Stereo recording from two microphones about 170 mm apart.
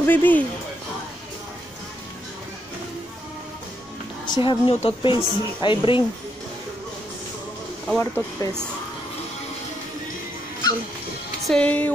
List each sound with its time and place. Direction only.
0.0 s speech: 10° left (ahead or behind)
4.3 s a woman's voice: 30° left (ahead or behind)
8.0 s speech: 15° left (ahead or behind)
11.4 s speech: 5° left (ahead or behind)